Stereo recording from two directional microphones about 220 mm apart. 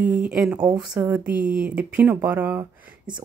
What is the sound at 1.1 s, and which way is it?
Speech, 5° right (ahead or behind).